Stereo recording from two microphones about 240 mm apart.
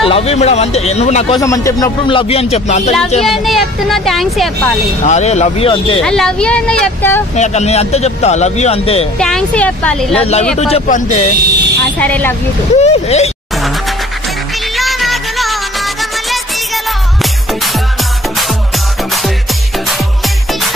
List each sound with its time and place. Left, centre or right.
0.0 s a man's voice: left
1.4 s a man's voice: centre
3.3 s speech: centre
5.0 s a man's voice: left
6.0 s speech: centre
7.3 s a man's voice: left
9.2 s speech: centre
10.1 s a man's voice: left
10.4 s speech: centre
10.7 s a man's voice: left
12.0 s speech: centre
12.7 s a man's voice: left
14.8 s music: centre